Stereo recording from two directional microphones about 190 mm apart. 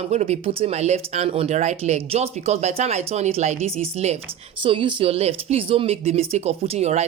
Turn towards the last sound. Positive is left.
turn(degrees=-35)  # may be behind; listen again after turning